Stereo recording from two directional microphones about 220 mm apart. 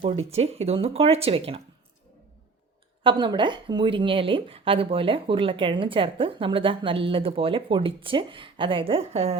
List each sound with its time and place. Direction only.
0.0 s speech: 30° right (ahead or behind)
3.0 s speech: 20° right (ahead or behind)